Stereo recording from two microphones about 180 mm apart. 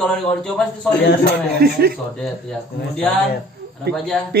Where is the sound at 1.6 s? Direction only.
55° right (ahead or behind).